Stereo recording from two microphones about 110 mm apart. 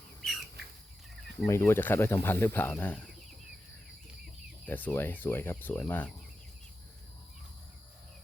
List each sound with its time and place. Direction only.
0.2 s bird: centre (ahead or behind)
1.5 s speech: 25° left (ahead or behind)
4.6 s speech: 15° left (ahead or behind)